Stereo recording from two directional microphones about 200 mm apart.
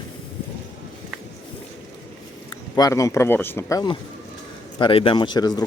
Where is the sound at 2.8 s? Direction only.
15° left (ahead or behind).